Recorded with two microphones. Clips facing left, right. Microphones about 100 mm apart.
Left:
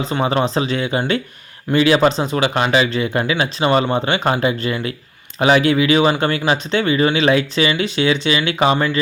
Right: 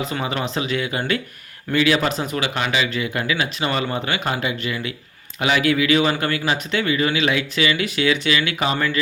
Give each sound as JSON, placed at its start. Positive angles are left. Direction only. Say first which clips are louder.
{"t": 0.0, "sound": "speech", "louder": "left 6 dB", "side_deg": 30}